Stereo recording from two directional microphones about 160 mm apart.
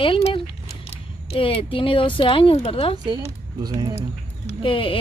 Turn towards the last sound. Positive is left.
turn(degrees=35)  # may be behind; listen again after turning